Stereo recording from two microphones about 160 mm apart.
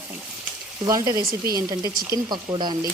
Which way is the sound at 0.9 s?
20° right (ahead or behind).